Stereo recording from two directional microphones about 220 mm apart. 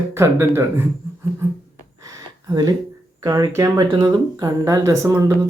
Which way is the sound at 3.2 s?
15° right (ahead or behind).